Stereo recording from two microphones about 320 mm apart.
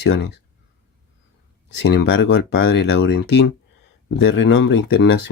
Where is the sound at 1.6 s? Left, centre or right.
Left.